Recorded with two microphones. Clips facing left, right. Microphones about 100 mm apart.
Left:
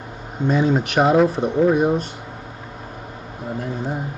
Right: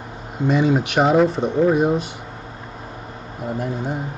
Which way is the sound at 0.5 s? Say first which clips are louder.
Right 1 dB; centre (ahead or behind).